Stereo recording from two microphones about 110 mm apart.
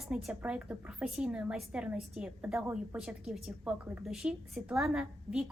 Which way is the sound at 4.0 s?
5° right (ahead or behind).